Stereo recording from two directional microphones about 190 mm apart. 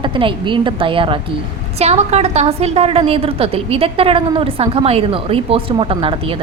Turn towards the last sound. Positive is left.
turn(degrees=-30)  # may be behind; listen again after turning